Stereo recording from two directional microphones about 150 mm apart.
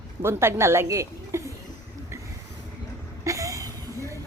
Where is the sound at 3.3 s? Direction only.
20° right (ahead or behind).